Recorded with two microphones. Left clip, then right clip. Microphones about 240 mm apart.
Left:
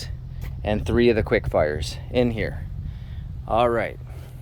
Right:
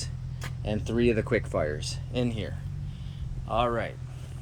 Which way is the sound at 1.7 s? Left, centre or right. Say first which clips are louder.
Left 4 dB; centre.